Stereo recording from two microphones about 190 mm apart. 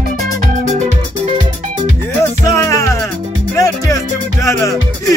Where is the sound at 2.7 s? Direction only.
15° left (ahead or behind).